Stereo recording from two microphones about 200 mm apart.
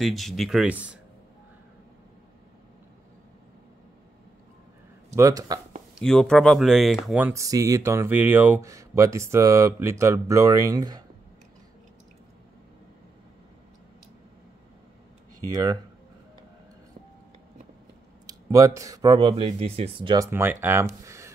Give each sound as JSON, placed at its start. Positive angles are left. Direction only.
{"t": 0.0, "sound": "speech", "side_deg": 0}
{"t": 5.1, "sound": "speech", "side_deg": -15}
{"t": 5.9, "sound": "speech", "side_deg": 5}
{"t": 15.5, "sound": "speech", "side_deg": -20}
{"t": 18.2, "sound": "speech", "side_deg": -15}
{"t": 20.2, "sound": "speech", "side_deg": -10}